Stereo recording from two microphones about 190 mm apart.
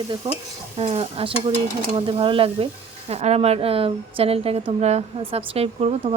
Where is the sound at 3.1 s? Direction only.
35° right (ahead or behind).